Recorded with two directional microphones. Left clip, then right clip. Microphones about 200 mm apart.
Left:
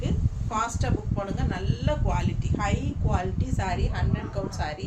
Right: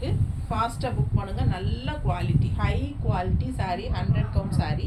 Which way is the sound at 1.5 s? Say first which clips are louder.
Left 3 dB; 15° left (ahead or behind).